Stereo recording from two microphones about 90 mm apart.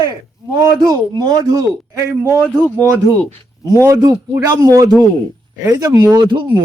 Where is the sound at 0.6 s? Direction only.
45° right (ahead or behind).